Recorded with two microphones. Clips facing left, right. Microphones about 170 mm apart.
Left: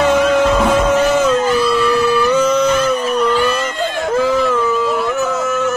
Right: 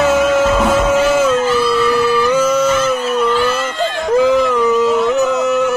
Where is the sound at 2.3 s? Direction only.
5° right (ahead or behind).